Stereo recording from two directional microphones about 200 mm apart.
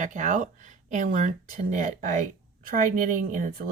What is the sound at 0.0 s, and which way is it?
Speech, 40° right (ahead or behind).